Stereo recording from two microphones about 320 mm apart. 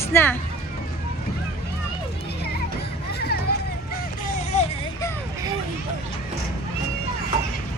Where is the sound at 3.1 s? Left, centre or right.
Left.